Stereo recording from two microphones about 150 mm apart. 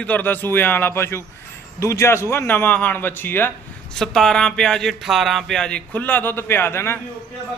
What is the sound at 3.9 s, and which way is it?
A man's voice, 5° left (ahead or behind).